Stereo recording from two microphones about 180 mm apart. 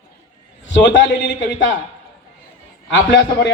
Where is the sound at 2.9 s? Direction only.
80° left.